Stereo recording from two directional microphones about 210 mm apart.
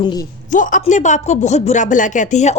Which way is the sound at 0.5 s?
40° left (ahead or behind).